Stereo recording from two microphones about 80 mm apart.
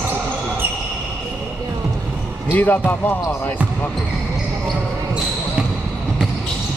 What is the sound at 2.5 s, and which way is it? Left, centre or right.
Speech, left.